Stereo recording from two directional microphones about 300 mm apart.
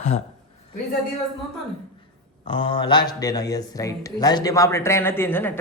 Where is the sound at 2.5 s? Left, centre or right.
Centre.